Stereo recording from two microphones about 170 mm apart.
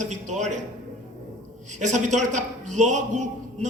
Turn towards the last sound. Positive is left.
turn(degrees=-45)  # may be behind; listen again after turning